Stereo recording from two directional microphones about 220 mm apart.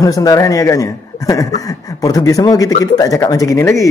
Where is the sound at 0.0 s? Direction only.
15° left (ahead or behind).